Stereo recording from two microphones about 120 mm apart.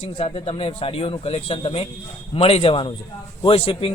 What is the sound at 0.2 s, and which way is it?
A man's voice, 55° left (ahead or behind).